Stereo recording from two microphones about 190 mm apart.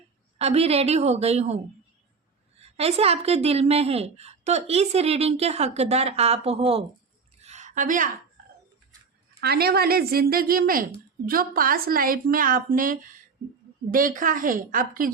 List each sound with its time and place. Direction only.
0.3 s a woman's voice: 35° right (ahead or behind)
2.6 s a woman's voice: 35° right (ahead or behind)
7.4 s a sound: 40° right (ahead or behind)
9.4 s a woman's voice: 55° right (ahead or behind)